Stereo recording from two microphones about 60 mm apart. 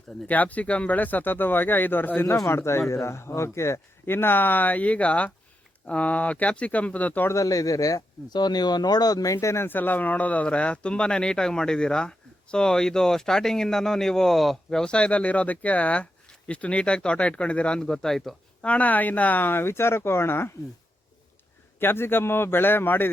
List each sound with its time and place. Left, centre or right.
0.3 s speech: left
2.5 s speech: left
7.3 s speech: left
9.0 s speech: left
9.6 s speech: left; by 18.3 s centre
18.6 s speech: left
21.8 s speech: left